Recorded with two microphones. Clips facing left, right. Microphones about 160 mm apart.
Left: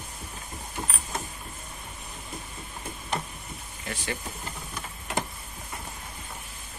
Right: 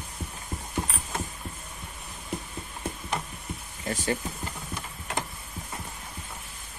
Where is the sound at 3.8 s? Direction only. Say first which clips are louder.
Right 6 dB; 40° right (ahead or behind).